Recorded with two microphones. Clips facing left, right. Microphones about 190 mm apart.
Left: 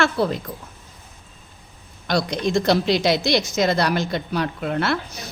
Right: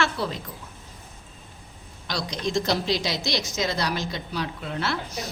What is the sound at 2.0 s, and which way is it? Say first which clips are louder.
A woman's voice: left 7 dB; 55° left (ahead or behind).